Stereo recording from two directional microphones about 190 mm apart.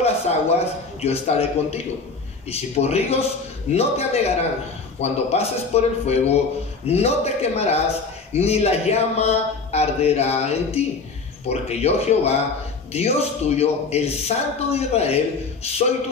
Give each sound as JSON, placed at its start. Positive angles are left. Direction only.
{"t": 0.0, "sound": "a man's voice", "side_deg": 35}